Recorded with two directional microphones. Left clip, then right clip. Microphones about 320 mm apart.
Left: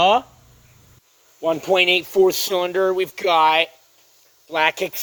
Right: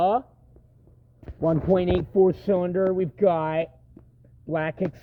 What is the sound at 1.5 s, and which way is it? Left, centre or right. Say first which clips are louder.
Speech: left 5 dB; left.